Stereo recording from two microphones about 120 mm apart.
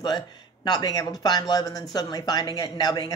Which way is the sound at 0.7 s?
35° left (ahead or behind).